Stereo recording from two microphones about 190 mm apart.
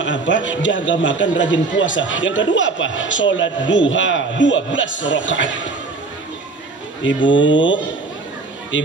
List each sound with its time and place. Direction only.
0.0 s a man's voice: 75° left (ahead or behind)
7.2 s a man's voice: 75° left (ahead or behind)